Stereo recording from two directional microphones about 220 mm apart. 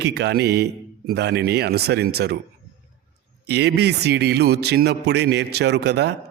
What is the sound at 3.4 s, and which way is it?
Speech, 50° right (ahead or behind).